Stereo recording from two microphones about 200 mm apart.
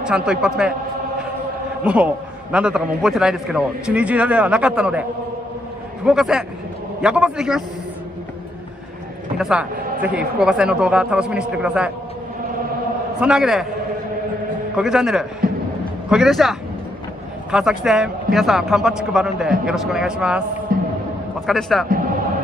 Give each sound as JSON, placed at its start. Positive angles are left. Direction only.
{"t": 0.0, "sound": "a man's voice", "side_deg": -5}
{"t": 1.9, "sound": "a man's voice", "side_deg": -5}
{"t": 6.0, "sound": "a man's voice", "side_deg": -5}
{"t": 9.4, "sound": "a man's voice", "side_deg": -5}
{"t": 13.2, "sound": "a man's voice", "side_deg": -5}
{"t": 14.8, "sound": "a man's voice", "side_deg": -5}
{"t": 20.7, "sound": "music", "side_deg": -45}
{"t": 21.5, "sound": "a man's voice", "side_deg": 0}